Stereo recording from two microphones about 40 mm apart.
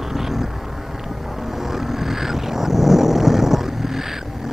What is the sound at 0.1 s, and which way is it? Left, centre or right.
Vehicle, centre.